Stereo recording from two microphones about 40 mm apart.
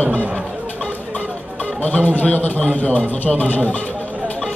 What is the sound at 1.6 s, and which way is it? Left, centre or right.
A man's voice, left.